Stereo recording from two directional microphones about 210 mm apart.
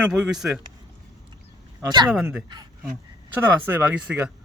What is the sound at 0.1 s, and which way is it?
Speech, centre (ahead or behind).